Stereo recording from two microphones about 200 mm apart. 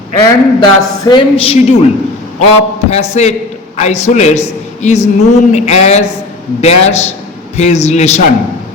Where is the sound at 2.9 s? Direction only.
35° left (ahead or behind).